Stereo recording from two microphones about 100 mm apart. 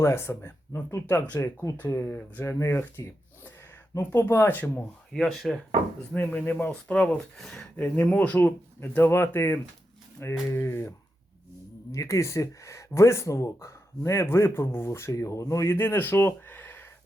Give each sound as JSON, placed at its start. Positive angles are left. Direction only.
{"t": 0.0, "sound": "speech", "side_deg": 25}
{"t": 1.0, "sound": "speech", "side_deg": 15}
{"t": 5.1, "sound": "speech", "side_deg": 5}
{"t": 6.1, "sound": "speech", "side_deg": 15}
{"t": 7.8, "sound": "speech", "side_deg": 15}